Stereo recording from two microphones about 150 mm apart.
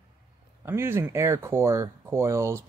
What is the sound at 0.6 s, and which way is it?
Speech, 15° right (ahead or behind).